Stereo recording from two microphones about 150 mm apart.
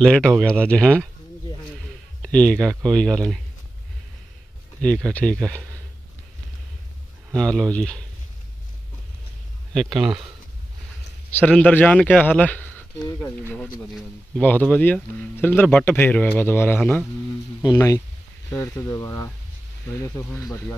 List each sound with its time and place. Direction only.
0.0 s speech: 5° left (ahead or behind)
2.2 s speech: 5° left (ahead or behind)
4.8 s speech: 5° left (ahead or behind)
7.3 s speech: 5° left (ahead or behind)
9.9 s speech: 5° right (ahead or behind)
11.3 s speech: 10° left (ahead or behind)
17.6 s speech: 25° left (ahead or behind)